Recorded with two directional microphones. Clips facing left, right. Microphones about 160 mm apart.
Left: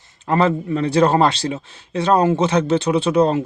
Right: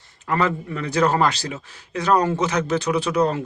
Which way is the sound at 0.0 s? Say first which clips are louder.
Left 5 dB; 30° left (ahead or behind).